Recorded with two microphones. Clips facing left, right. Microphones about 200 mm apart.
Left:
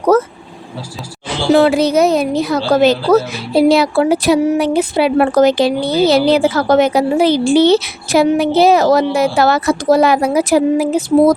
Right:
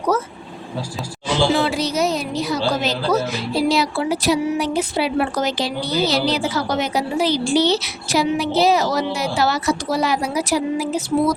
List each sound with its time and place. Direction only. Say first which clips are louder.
1.3 s a woman's voice: left 7 dB; 55° left (ahead or behind)